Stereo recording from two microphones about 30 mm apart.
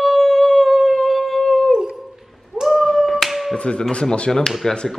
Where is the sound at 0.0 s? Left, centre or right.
Centre.